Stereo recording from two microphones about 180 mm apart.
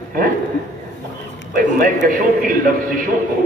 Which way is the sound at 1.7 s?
45° right (ahead or behind).